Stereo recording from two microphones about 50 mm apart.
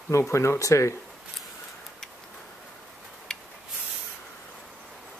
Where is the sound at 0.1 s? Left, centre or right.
Left.